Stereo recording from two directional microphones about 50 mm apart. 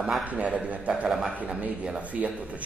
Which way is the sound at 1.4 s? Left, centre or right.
Right.